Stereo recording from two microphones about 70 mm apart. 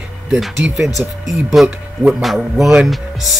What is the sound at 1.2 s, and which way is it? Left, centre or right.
Speech, centre.